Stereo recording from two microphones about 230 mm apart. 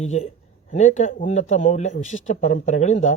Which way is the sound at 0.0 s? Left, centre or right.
Left.